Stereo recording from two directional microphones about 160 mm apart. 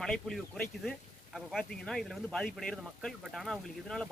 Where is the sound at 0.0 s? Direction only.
5° left (ahead or behind).